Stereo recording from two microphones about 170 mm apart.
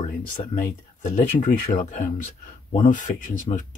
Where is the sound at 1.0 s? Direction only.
45° left (ahead or behind).